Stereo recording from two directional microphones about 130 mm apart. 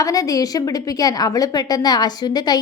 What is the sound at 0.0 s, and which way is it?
A woman's voice, 25° left (ahead or behind).